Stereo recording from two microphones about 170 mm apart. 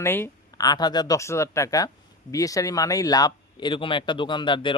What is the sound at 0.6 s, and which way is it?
Speech, 25° left (ahead or behind).